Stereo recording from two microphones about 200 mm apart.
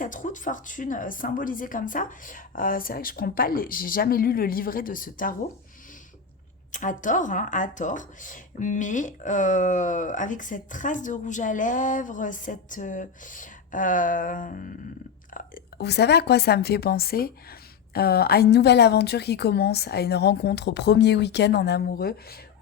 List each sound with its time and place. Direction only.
0.0 s speech: 40° left (ahead or behind)
6.7 s a woman's voice: 40° left (ahead or behind)